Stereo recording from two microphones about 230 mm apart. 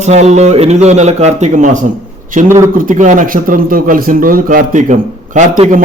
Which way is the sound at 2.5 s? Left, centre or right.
Centre.